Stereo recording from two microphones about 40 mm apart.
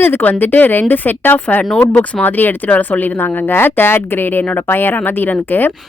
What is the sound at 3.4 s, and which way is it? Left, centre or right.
Speech, left.